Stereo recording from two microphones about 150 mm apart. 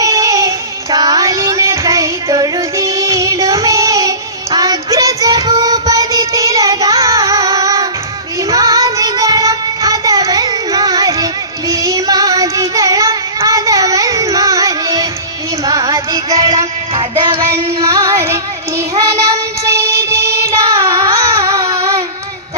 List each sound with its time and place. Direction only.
0.0 s child singing: 20° right (ahead or behind)
15.6 s music: 20° right (ahead or behind)
16.9 s music: 35° right (ahead or behind)
17.4 s female singing: 20° right (ahead or behind)
18.8 s child singing: 20° right (ahead or behind)